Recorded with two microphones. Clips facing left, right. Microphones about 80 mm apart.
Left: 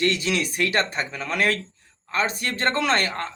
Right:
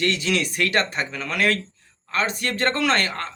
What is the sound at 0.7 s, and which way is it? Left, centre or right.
A man's voice, left.